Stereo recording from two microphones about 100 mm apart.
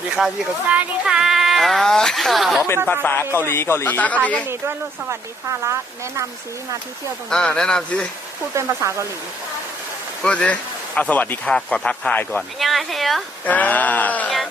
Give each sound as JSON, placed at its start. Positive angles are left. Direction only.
{"t": 0.7, "sound": "speech", "side_deg": -10}
{"t": 2.8, "sound": "a man's voice", "side_deg": 20}
{"t": 4.4, "sound": "speech", "side_deg": -25}
{"t": 7.3, "sound": "speech", "side_deg": 5}
{"t": 8.5, "sound": "speech", "side_deg": -30}
{"t": 10.2, "sound": "speech", "side_deg": 10}
{"t": 12.4, "sound": "speech", "side_deg": 0}
{"t": 13.4, "sound": "speech", "side_deg": 15}